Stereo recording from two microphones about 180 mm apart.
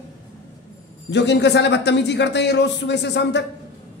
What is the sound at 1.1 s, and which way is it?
A man's voice, 75° left (ahead or behind).